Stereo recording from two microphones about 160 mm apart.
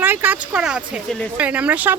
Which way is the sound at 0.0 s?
10° right (ahead or behind).